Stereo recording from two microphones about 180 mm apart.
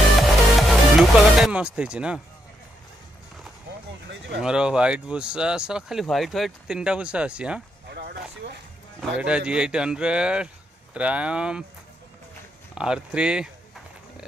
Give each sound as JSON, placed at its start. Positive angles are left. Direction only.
{"t": 0.6, "sound": "speech", "side_deg": 0}
{"t": 4.4, "sound": "speech", "side_deg": -5}
{"t": 7.9, "sound": "a sound", "side_deg": -65}
{"t": 9.0, "sound": "speech", "side_deg": -5}
{"t": 12.7, "sound": "speech", "side_deg": -5}